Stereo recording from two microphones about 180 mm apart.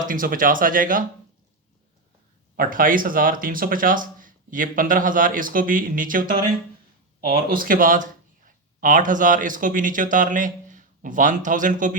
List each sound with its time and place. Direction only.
0.1 s speech: 50° right (ahead or behind)
2.6 s speech: 50° right (ahead or behind)
7.5 s speech: 50° right (ahead or behind)